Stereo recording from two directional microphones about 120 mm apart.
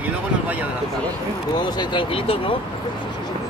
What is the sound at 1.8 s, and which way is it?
Speech, 45° left (ahead or behind).